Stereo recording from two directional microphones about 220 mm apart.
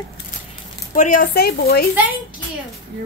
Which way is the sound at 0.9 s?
35° left (ahead or behind).